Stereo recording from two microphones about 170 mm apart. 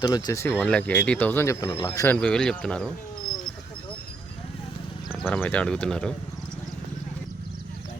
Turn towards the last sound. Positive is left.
turn(degrees=5)  # may be behind; listen again after turning